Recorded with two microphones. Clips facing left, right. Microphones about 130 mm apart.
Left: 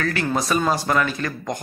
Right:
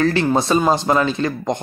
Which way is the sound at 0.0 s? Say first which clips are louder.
Right 6 dB; 30° right (ahead or behind).